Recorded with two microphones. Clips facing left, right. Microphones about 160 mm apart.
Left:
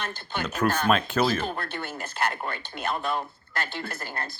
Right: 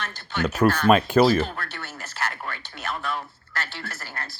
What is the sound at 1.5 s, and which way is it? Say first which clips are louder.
Speech: left 3 dB; 15° left (ahead or behind).